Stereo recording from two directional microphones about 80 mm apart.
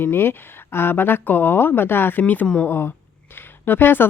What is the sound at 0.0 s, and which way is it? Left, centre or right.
Speech, left.